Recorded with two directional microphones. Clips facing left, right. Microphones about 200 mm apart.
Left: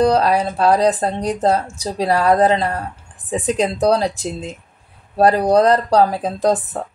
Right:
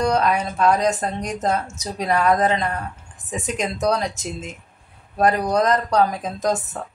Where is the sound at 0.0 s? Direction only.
35° left (ahead or behind).